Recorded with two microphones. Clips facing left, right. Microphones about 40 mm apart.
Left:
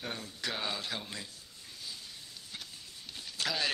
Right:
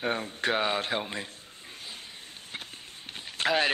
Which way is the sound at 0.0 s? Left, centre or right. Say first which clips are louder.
Right 10 dB; right.